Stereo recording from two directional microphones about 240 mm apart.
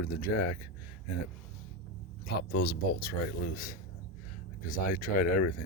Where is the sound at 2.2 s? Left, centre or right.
Left.